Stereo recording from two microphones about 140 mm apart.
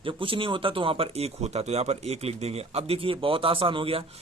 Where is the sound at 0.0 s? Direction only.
40° right (ahead or behind).